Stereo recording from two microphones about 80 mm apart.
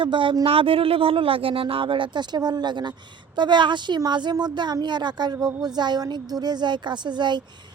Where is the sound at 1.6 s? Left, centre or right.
Right.